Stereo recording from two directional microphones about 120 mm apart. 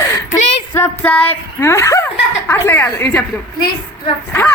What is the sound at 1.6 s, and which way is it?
Speech, 25° left (ahead or behind).